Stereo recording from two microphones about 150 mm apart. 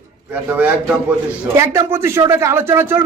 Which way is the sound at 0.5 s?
10° right (ahead or behind).